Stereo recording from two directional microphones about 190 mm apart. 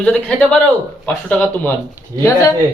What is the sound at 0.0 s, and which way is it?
Speech, 5° left (ahead or behind).